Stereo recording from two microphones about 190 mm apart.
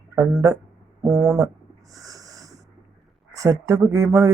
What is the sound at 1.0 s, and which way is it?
Speech, 10° right (ahead or behind).